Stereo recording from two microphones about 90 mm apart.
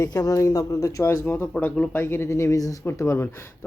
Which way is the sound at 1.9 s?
25° left (ahead or behind).